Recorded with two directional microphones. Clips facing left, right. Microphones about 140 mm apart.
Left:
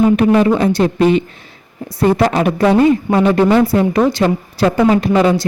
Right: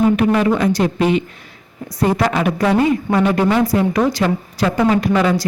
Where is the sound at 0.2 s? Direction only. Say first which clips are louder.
Left 3 dB; 30° left (ahead or behind).